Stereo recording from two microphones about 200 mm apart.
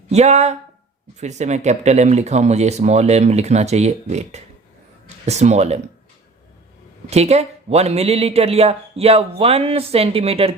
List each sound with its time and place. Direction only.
0.1 s speech: 35° right (ahead or behind)
7.1 s speech: 35° right (ahead or behind)